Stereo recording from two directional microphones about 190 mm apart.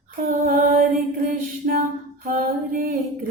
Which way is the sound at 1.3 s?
45° right (ahead or behind).